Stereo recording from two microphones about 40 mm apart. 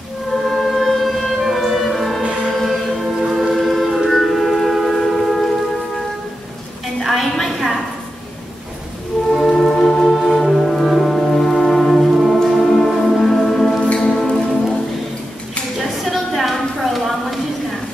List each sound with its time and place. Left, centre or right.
0.5 s music: centre
3.3 s train: centre
4.9 s music: centre
7.0 s a sound: centre
9.3 s music: centre
9.8 s music: centre
13.8 s music: left
14.1 s music: centre
16.0 s a sound: centre